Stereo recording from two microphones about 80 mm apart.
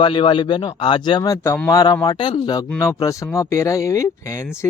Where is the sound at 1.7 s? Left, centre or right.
Left.